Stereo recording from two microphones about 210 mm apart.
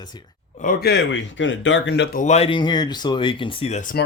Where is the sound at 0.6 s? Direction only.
45° left (ahead or behind).